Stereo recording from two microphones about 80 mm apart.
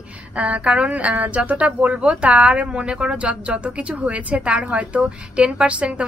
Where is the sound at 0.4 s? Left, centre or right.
Centre.